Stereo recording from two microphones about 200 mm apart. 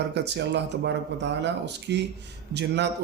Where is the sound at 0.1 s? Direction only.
60° right (ahead or behind).